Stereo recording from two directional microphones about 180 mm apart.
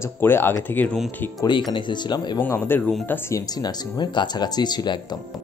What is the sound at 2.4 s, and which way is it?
Speech, 10° left (ahead or behind).